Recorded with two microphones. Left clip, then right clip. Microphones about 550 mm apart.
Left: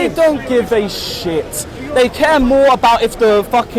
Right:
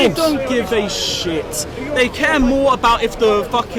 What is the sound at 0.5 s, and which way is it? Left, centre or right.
A man's voice, centre.